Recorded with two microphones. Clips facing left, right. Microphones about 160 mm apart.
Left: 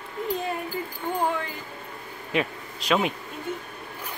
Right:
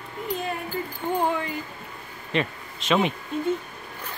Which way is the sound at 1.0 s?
20° right (ahead or behind).